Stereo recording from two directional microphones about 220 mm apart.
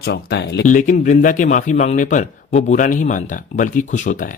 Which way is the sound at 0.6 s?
35° left (ahead or behind).